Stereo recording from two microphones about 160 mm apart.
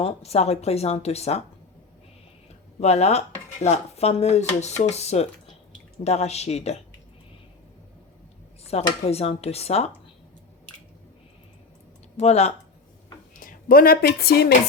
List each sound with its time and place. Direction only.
0.0 s speech: 40° left (ahead or behind)
2.8 s speech: 40° left (ahead or behind)
8.6 s speech: 40° left (ahead or behind)
12.1 s speech: 45° left (ahead or behind)
13.4 s speech: 65° left (ahead or behind)